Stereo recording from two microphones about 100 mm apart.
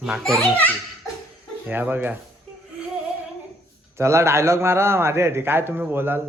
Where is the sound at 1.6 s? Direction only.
20° right (ahead or behind).